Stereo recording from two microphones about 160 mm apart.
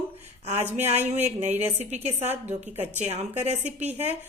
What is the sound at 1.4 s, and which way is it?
Speech, 10° right (ahead or behind).